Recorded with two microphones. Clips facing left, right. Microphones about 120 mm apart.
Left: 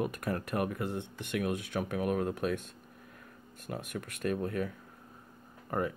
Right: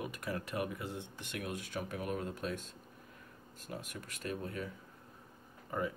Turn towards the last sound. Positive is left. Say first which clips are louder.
# left 4 dB
turn(degrees=60)  # may be behind; listen again after turning